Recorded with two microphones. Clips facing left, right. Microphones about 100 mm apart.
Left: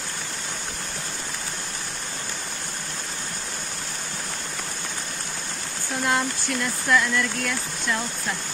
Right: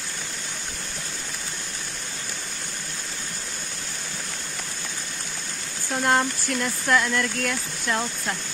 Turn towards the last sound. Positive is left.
turn(degrees=-50)  # may be behind; listen again after turning